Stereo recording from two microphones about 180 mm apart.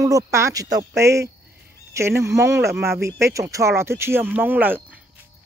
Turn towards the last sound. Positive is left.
turn(degrees=-10)  # may be behind; listen again after turning